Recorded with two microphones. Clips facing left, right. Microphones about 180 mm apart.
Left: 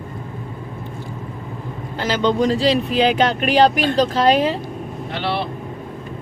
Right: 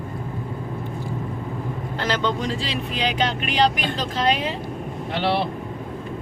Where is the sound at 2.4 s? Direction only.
35° left (ahead or behind).